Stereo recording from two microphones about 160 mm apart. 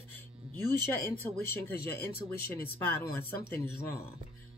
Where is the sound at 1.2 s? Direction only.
15° left (ahead or behind).